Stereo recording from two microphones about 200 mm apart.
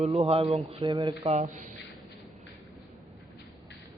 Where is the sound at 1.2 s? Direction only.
35° right (ahead or behind).